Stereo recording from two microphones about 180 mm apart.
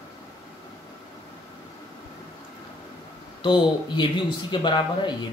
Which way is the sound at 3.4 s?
25° left (ahead or behind).